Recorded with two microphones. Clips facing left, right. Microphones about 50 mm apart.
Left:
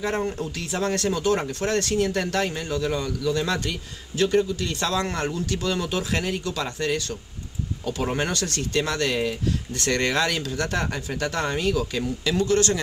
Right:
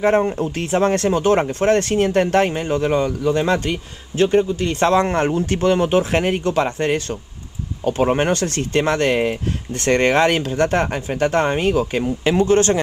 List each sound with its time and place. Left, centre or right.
0.0 s speech: right